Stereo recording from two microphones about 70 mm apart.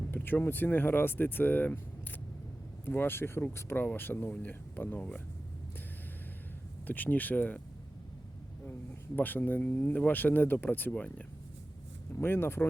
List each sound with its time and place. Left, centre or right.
0.1 s speech: left
2.8 s speech: left
6.8 s speech: left
9.1 s speech: left
12.2 s speech: left